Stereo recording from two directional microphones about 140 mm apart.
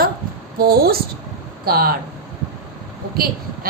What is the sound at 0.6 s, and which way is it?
A woman's voice, 90° right.